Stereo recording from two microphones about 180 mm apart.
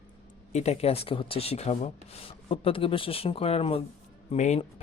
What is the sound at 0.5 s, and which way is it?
Speech, 35° left (ahead or behind).